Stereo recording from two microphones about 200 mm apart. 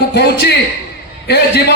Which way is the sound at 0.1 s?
55° left (ahead or behind).